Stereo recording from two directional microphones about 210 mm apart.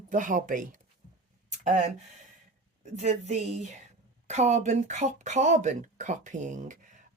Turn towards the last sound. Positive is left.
turn(degrees=-35)  # may be behind; listen again after turning